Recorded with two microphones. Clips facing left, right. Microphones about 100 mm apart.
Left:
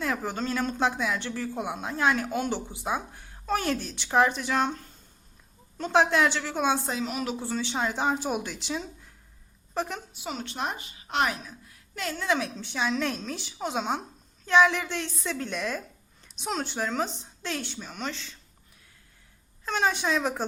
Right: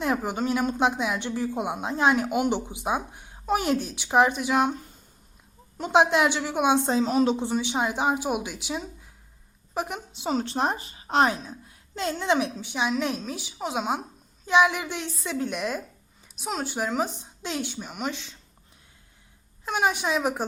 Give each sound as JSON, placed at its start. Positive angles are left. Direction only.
{"t": 0.0, "sound": "speech", "side_deg": -20}
{"t": 6.8, "sound": "speech", "side_deg": -30}
{"t": 10.2, "sound": "a woman's voice", "side_deg": -35}
{"t": 16.3, "sound": "speech", "side_deg": -5}
{"t": 19.6, "sound": "speech", "side_deg": -10}